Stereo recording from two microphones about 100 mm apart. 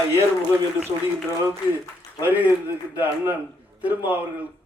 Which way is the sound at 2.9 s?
15° right (ahead or behind).